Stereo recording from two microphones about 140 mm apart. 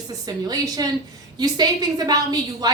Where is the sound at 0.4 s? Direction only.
25° right (ahead or behind).